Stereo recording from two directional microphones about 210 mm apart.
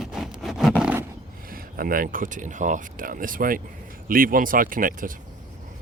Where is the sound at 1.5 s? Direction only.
45° right (ahead or behind).